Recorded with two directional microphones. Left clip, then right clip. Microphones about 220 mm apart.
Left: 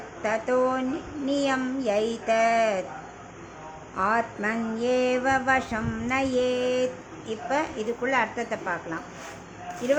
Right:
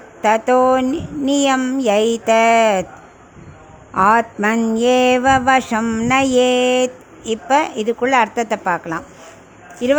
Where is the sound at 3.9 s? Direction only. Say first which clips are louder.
Right 11 dB; 50° right (ahead or behind).